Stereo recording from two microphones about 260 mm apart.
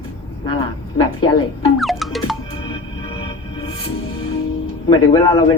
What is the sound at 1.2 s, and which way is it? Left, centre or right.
Speech, centre.